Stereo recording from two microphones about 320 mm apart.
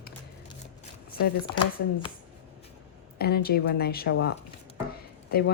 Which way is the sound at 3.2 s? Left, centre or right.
Left.